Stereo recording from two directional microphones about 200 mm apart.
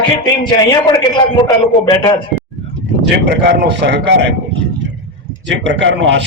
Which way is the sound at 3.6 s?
60° right (ahead or behind).